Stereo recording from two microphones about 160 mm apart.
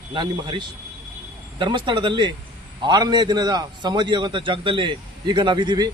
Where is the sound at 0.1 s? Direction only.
30° right (ahead or behind).